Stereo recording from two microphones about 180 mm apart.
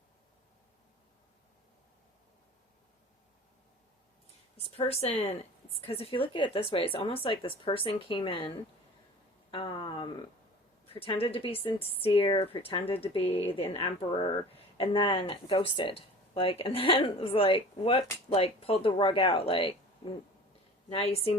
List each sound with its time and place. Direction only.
4.8 s speech: 35° left (ahead or behind)
20.9 s speech: 35° left (ahead or behind)